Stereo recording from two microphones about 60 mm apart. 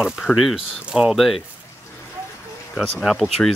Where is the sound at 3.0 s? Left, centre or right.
Centre.